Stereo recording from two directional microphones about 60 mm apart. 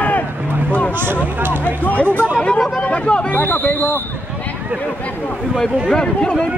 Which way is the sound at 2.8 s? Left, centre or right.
Centre.